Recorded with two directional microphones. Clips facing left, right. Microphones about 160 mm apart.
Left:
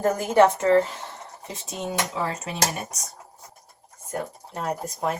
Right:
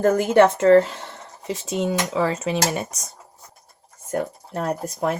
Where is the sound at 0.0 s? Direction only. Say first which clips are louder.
Right 3 dB; 75° right (ahead or behind).